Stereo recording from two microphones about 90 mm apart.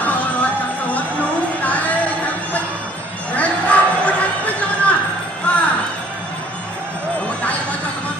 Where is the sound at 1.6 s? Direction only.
15° left (ahead or behind).